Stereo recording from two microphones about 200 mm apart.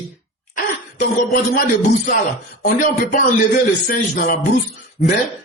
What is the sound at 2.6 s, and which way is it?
A man's voice, 45° left (ahead or behind).